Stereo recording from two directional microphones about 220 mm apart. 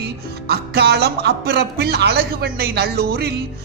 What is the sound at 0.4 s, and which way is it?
Speech, 45° right (ahead or behind).